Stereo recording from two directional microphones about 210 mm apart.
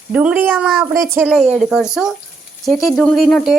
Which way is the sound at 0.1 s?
5° right (ahead or behind).